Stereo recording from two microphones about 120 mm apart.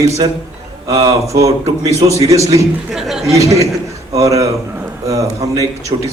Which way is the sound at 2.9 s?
5° right (ahead or behind).